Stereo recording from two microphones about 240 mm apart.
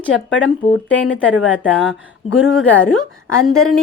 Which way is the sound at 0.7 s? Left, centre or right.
Left.